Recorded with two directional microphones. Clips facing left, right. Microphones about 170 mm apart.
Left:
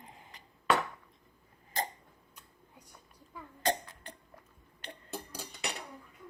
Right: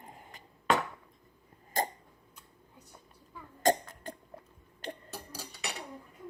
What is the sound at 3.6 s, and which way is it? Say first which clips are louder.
Cough: right 5 dB; 45° right (ahead or behind).